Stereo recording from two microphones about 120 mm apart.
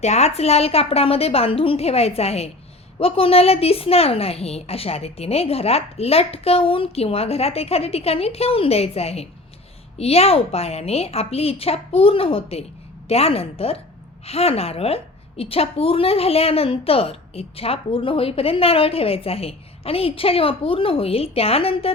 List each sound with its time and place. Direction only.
0.0 s a woman's voice: 65° left (ahead or behind)